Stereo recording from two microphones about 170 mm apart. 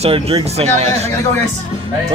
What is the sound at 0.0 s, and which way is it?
Speech, 35° right (ahead or behind).